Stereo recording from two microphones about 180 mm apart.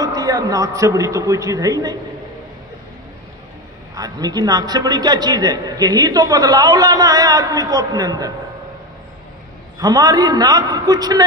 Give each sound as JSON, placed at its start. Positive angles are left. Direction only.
{"t": 0.0, "sound": "a man's voice", "side_deg": -20}
{"t": 3.9, "sound": "a man's voice", "side_deg": -20}
{"t": 9.8, "sound": "a man's voice", "side_deg": -20}